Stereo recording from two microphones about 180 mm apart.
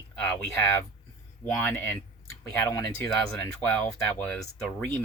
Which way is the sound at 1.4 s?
10° left (ahead or behind).